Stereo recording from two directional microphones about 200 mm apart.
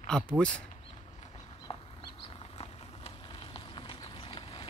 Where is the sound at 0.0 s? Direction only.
5° left (ahead or behind).